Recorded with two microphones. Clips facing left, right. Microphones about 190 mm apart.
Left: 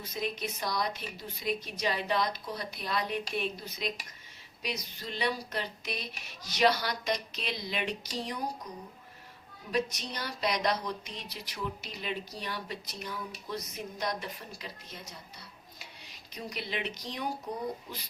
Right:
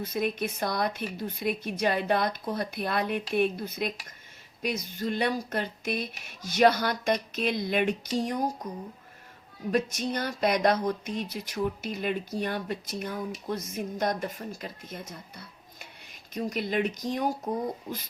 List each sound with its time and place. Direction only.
0.0 s speech: 55° right (ahead or behind)
9.7 s speech: 50° right (ahead or behind)